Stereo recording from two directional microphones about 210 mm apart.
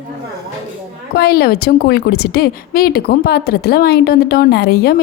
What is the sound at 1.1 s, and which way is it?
A woman's voice, 50° left (ahead or behind).